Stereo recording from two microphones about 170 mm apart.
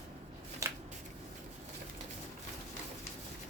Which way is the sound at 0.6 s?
20° right (ahead or behind).